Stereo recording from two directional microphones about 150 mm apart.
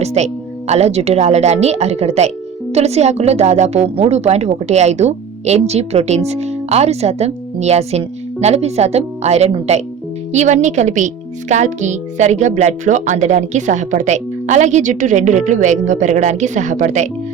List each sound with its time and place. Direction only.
0.0 s a woman's voice: 45° right (ahead or behind)